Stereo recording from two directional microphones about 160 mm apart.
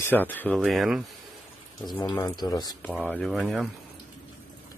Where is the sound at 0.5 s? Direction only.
Centre (ahead or behind).